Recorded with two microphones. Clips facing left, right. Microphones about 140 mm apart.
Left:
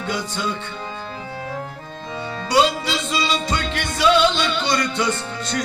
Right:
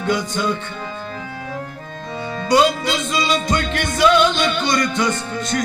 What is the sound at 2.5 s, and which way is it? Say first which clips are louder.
Music: right 3 dB; 50° right (ahead or behind).